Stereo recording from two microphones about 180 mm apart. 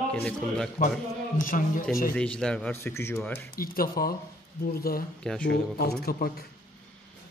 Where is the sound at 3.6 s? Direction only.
55° left (ahead or behind).